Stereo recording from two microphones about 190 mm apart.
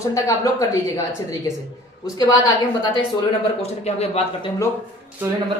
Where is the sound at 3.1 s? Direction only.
30° left (ahead or behind).